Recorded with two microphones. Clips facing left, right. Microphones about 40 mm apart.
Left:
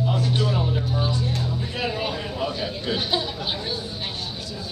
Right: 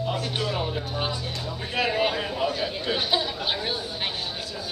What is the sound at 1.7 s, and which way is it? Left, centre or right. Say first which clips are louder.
Music: right 6 dB; right.